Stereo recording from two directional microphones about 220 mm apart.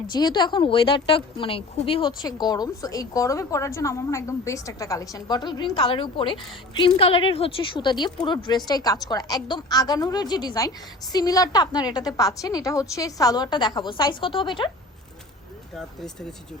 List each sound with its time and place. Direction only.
0.1 s a woman's voice: 20° left (ahead or behind)
15.7 s speech: centre (ahead or behind)